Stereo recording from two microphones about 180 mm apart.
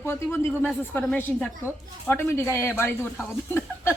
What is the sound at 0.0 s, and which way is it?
A woman's voice, 15° left (ahead or behind).